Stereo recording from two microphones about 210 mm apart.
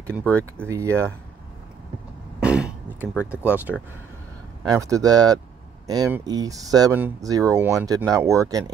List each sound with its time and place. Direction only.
0.2 s speech: 5° left (ahead or behind)
0.7 s speech: 15° right (ahead or behind)
2.4 s a sound: 5° right (ahead or behind)
3.7 s speech: centre (ahead or behind)
4.6 s speech: 15° right (ahead or behind)